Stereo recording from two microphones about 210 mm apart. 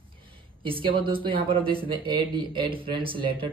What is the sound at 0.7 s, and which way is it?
Speech, 25° right (ahead or behind).